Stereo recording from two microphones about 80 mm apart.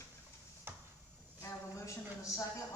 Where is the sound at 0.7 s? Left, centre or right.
Right.